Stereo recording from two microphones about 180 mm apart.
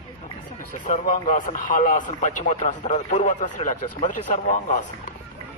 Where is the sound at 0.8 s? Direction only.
45° left (ahead or behind).